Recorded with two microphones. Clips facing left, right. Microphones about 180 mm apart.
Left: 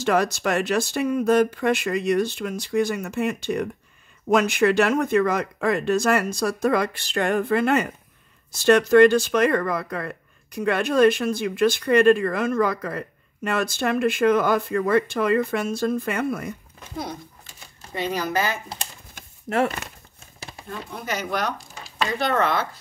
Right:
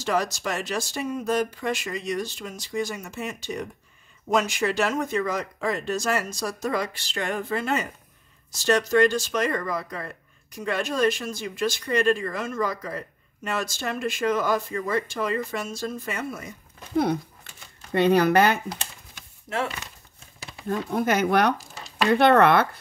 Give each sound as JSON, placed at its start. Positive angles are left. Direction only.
{"t": 0.0, "sound": "speech", "side_deg": 60}
{"t": 16.9, "sound": "speech", "side_deg": -60}
{"t": 19.1, "sound": "a sound", "side_deg": 55}
{"t": 20.6, "sound": "speech", "side_deg": -45}
{"t": 21.7, "sound": "a sound", "side_deg": 0}
{"t": 22.1, "sound": "speech", "side_deg": -65}